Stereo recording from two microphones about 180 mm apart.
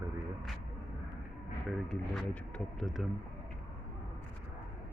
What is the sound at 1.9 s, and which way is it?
Speech, 5° left (ahead or behind).